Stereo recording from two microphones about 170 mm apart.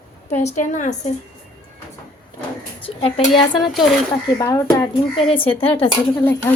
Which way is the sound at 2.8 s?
35° left (ahead or behind).